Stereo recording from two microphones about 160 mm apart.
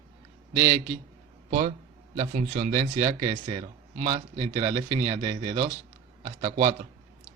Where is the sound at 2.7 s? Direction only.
35° right (ahead or behind).